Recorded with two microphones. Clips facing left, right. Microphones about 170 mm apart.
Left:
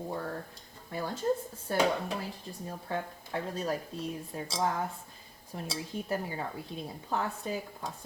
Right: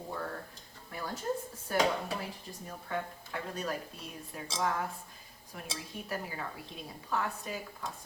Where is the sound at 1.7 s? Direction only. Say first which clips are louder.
Left 2 dB; 30° left (ahead or behind).